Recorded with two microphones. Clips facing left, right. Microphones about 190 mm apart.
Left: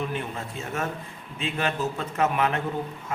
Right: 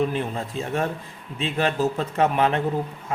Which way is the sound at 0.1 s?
30° right (ahead or behind).